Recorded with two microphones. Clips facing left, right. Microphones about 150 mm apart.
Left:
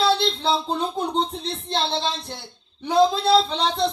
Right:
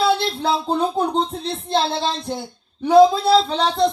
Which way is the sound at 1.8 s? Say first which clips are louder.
Right 3 dB; 5° right (ahead or behind).